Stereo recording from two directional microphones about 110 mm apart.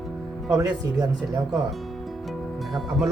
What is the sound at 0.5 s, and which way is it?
Speech, 35° right (ahead or behind).